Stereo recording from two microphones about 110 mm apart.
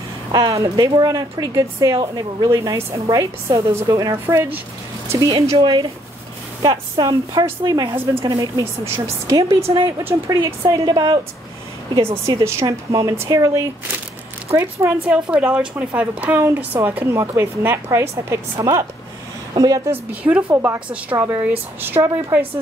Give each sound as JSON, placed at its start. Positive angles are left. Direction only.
{"t": 0.3, "sound": "a woman's voice", "side_deg": -35}
{"t": 5.6, "sound": "speech", "side_deg": -50}
{"t": 6.6, "sound": "a woman's voice", "side_deg": -40}
{"t": 7.9, "sound": "a woman's voice", "side_deg": -20}
{"t": 8.3, "sound": "a woman's voice", "side_deg": -35}
{"t": 8.8, "sound": "a woman's voice", "side_deg": -25}
{"t": 10.7, "sound": "a woman's voice", "side_deg": -40}
{"t": 11.9, "sound": "a woman's voice", "side_deg": -25}
{"t": 15.0, "sound": "a woman's voice", "side_deg": -10}
{"t": 19.9, "sound": "a woman's voice", "side_deg": -15}